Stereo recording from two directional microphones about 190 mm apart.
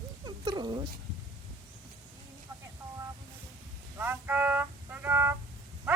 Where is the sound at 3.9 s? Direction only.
10° right (ahead or behind).